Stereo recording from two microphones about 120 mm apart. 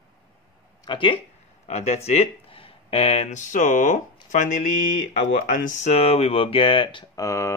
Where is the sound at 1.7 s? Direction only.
60° left (ahead or behind); by 7.1 s 45° left (ahead or behind).